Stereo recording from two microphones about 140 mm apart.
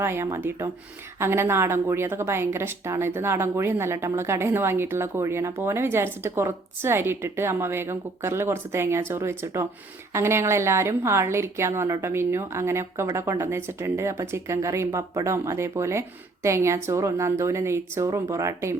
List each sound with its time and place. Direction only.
0.0 s a woman's voice: 15° right (ahead or behind)